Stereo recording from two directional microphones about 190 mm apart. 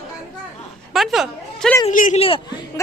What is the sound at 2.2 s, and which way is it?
Speech, 25° left (ahead or behind).